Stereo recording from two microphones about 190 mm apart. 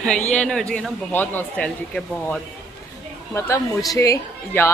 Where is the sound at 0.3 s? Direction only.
5° left (ahead or behind).